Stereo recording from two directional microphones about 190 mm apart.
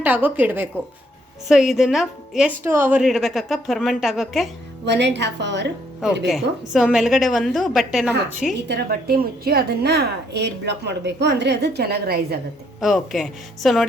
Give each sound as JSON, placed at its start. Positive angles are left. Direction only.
{"t": 0.0, "sound": "a woman's voice", "side_deg": -10}
{"t": 4.9, "sound": "a woman's voice", "side_deg": -65}
{"t": 6.2, "sound": "a woman's voice", "side_deg": 0}
{"t": 8.6, "sound": "a woman's voice", "side_deg": -55}
{"t": 12.8, "sound": "a woman's voice", "side_deg": 0}